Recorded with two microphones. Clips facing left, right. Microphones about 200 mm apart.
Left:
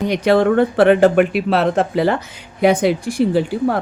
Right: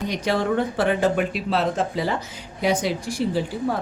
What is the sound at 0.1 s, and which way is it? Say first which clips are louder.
Speech: left 9 dB; 65° left (ahead or behind).